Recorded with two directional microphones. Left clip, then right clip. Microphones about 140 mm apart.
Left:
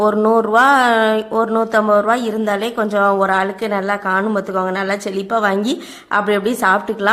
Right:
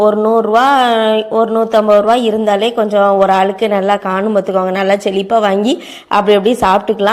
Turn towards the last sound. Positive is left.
turn(degrees=-15)  # may be behind; listen again after turning